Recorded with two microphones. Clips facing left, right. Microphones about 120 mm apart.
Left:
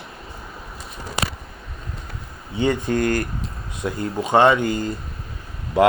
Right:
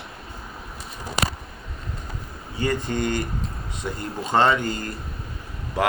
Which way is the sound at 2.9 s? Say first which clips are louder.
Left 4 dB; 5° left (ahead or behind).